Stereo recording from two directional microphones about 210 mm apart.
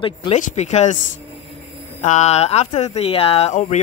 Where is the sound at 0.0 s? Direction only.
25° left (ahead or behind).